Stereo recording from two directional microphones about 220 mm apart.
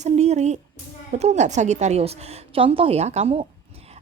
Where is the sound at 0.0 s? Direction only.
30° right (ahead or behind).